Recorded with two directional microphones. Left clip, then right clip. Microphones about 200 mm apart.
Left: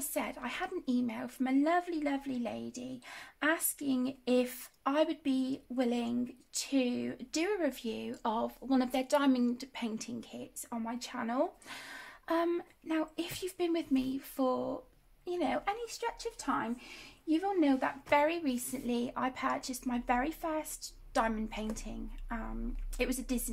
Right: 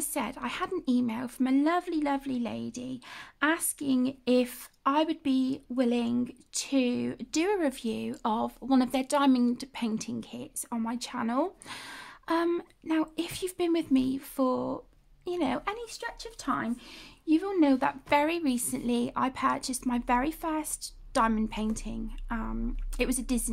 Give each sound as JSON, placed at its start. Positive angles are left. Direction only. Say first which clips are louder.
{"t": 0.0, "sound": "a woman's voice", "louder": "right 4 dB", "side_deg": -40}